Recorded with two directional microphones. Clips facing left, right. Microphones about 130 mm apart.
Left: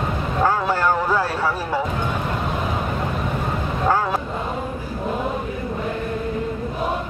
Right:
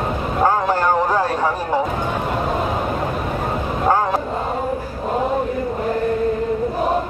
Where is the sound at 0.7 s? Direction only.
15° right (ahead or behind).